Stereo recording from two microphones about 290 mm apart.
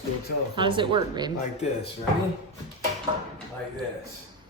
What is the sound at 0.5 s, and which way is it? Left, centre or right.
Speech, centre.